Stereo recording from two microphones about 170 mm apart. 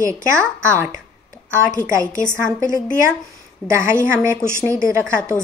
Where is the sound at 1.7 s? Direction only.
20° right (ahead or behind).